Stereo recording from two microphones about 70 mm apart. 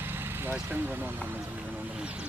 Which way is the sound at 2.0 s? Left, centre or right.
Centre.